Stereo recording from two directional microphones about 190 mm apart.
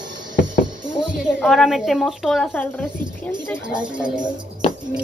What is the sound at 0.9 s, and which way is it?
A woman's voice, 5° right (ahead or behind).